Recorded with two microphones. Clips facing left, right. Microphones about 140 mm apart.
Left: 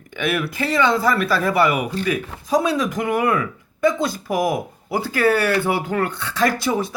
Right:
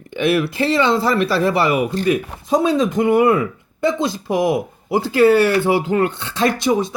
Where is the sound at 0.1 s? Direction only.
30° right (ahead or behind).